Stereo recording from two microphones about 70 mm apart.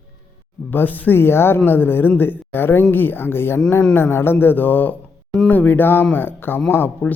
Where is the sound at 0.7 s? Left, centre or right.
Left.